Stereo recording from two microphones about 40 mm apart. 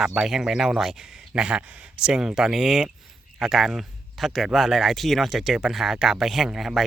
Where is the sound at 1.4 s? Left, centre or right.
Right.